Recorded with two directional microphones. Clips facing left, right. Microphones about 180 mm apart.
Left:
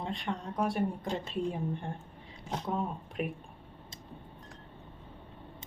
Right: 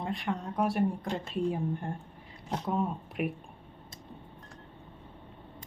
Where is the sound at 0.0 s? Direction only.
Centre (ahead or behind).